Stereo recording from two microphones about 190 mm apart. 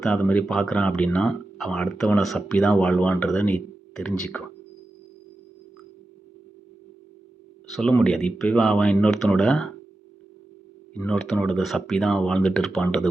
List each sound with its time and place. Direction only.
0.0 s speech: 5° left (ahead or behind)
7.7 s speech: 5° left (ahead or behind)
10.9 s speech: 5° left (ahead or behind)